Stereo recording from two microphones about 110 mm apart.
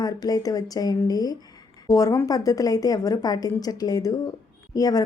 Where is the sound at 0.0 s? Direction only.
35° left (ahead or behind).